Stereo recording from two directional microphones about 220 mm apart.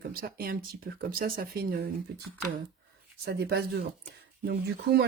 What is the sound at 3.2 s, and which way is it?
Speech, 50° right (ahead or behind).